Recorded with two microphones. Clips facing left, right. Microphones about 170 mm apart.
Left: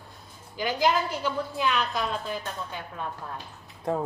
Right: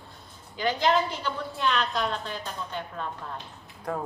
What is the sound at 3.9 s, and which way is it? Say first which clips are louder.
Speech: left 4 dB; 25° left (ahead or behind).